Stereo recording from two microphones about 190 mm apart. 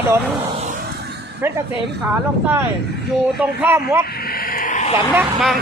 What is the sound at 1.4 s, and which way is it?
Speech, 10° right (ahead or behind).